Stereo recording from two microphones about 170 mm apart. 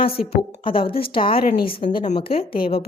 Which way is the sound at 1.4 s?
60° left (ahead or behind).